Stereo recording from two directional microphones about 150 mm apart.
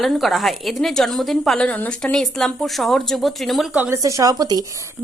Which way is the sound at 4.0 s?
20° right (ahead or behind).